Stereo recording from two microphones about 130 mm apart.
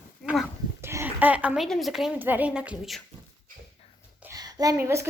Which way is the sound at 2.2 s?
15° right (ahead or behind).